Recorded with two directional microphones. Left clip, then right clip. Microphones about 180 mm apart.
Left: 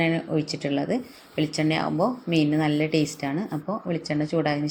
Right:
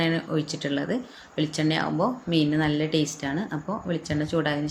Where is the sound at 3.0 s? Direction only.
10° left (ahead or behind).